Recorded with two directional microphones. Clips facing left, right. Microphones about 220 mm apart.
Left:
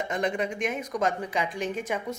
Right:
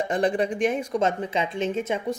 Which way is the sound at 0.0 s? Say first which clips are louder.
Right 5 dB; 35° right (ahead or behind).